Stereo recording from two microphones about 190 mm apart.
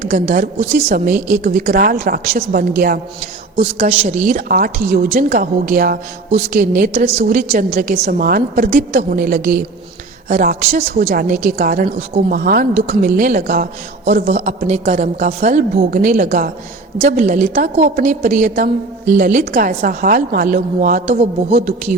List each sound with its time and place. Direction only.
0.0 s a woman's voice: 40° right (ahead or behind)
3.6 s a woman's voice: 30° right (ahead or behind)